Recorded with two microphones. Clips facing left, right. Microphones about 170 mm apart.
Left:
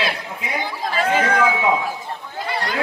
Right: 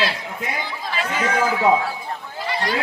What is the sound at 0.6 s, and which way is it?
Speech, 50° left (ahead or behind).